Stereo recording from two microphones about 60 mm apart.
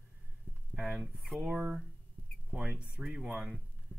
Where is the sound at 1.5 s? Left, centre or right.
Right.